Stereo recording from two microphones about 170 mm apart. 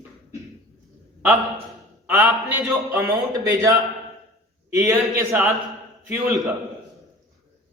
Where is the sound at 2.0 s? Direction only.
20° right (ahead or behind).